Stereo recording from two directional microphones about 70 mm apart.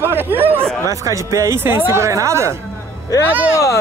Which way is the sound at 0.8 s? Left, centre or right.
Right.